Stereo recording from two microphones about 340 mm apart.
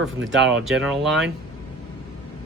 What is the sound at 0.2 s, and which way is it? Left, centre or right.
Speech, right.